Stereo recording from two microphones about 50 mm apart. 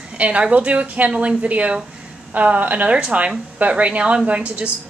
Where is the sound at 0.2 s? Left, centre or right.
Right.